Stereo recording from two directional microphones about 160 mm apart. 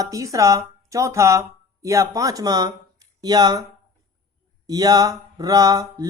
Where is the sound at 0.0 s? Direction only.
20° right (ahead or behind).